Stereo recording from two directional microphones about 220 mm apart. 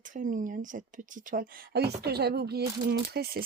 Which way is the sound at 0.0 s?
35° right (ahead or behind).